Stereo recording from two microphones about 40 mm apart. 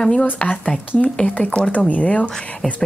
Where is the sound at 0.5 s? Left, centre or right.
Left.